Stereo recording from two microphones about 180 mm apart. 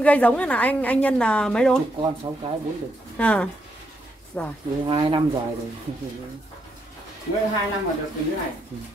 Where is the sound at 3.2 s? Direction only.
5° left (ahead or behind).